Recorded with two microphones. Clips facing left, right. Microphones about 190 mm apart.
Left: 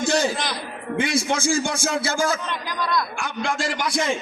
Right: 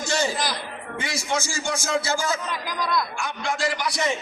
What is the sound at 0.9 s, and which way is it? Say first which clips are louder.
Speech: left 5 dB; 55° left (ahead or behind).